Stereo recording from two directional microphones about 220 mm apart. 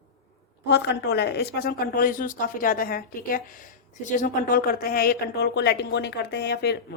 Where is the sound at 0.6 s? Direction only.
50° left (ahead or behind).